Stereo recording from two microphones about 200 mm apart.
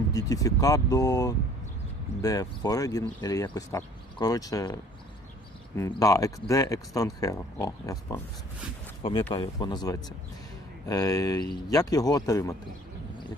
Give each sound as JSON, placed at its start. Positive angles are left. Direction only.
{"t": 0.1, "sound": "speech", "side_deg": 15}
{"t": 9.3, "sound": "speech", "side_deg": 25}